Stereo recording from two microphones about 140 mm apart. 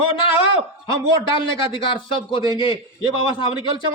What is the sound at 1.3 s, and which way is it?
A man's voice, 35° left (ahead or behind).